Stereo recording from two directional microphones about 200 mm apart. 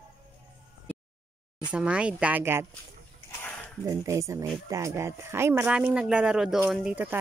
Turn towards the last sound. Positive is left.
turn(degrees=-5)  # may be behind; listen again after turning